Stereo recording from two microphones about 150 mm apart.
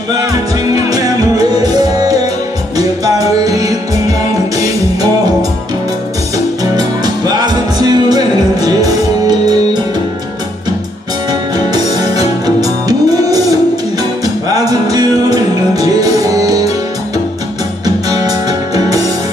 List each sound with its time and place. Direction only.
0.9 s music: 25° right (ahead or behind)
6.3 s music: 25° right (ahead or behind)
11.5 s music: 25° right (ahead or behind)
17.8 s music: 25° right (ahead or behind)